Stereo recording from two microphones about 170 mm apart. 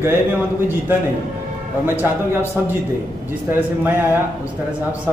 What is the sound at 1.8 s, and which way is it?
Speech, 10° right (ahead or behind).